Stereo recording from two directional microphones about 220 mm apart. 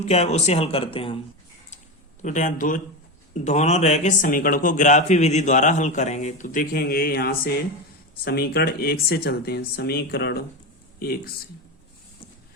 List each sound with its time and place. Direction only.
0.0 s speech: 30° left (ahead or behind)
2.2 s speech: 35° left (ahead or behind)